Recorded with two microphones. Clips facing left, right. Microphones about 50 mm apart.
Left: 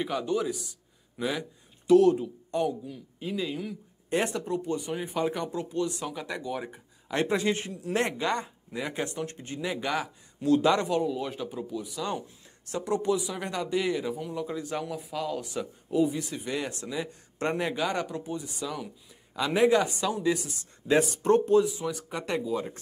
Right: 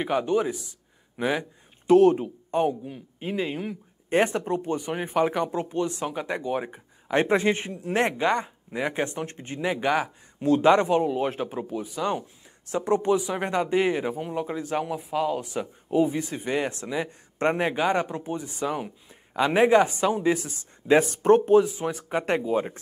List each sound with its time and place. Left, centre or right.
0.0 s a man's voice: right
14.6 s speech: right
21.5 s speech: right